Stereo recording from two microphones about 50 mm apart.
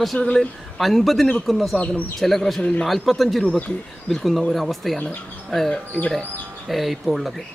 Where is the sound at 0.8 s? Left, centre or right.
Centre.